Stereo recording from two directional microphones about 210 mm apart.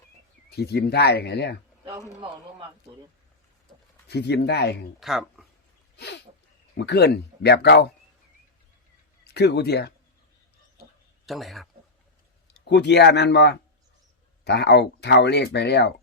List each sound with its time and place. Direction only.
0.5 s speech: 50° left (ahead or behind)
1.8 s a sound: 15° right (ahead or behind)
4.1 s speech: 50° left (ahead or behind)
4.9 s speech: centre (ahead or behind)
6.7 s speech: 55° left (ahead or behind)
9.2 s speech: 50° left (ahead or behind)
11.3 s speech: centre (ahead or behind)
12.5 s speech: 50° left (ahead or behind)